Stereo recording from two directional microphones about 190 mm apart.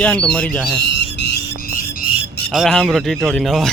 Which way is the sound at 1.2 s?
60° left (ahead or behind).